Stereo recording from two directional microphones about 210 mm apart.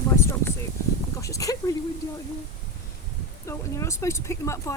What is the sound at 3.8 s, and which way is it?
Speech, 15° left (ahead or behind).